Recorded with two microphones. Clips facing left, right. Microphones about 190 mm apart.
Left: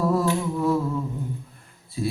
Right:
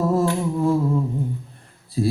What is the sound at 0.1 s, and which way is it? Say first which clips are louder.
Humming: right 2 dB; 25° right (ahead or behind).